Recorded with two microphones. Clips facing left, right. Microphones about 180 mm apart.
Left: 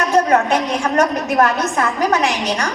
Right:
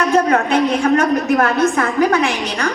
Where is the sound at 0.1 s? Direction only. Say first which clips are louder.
Left 2 dB; 55° right (ahead or behind).